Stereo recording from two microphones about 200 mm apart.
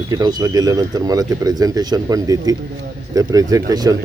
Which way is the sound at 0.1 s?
20° right (ahead or behind).